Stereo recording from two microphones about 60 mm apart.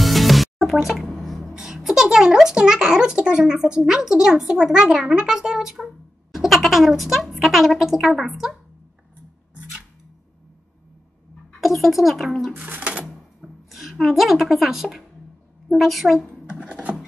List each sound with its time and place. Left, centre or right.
0.0 s music: centre
0.8 s a sound: centre
1.5 s speech: centre
11.6 s speech: centre
12.5 s cash register: right
13.4 s a woman's voice: centre
16.4 s a sound: centre